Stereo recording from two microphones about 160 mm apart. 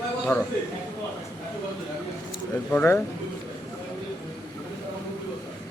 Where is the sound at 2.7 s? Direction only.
15° left (ahead or behind).